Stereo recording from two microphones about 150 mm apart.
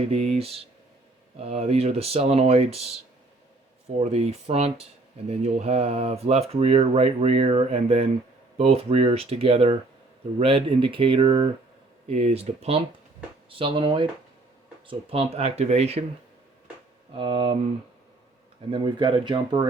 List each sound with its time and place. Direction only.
0.0 s speech: 45° right (ahead or behind)
4.0 s speech: 45° right (ahead or behind)
17.2 s speech: 35° right (ahead or behind)
18.7 s speech: 30° right (ahead or behind)